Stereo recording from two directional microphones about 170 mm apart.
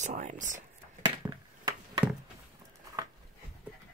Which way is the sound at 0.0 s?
45° right (ahead or behind).